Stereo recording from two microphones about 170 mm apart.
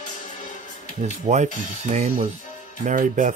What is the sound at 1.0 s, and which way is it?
Speech, 45° right (ahead or behind).